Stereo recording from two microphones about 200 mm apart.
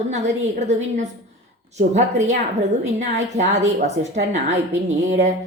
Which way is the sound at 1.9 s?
35° right (ahead or behind).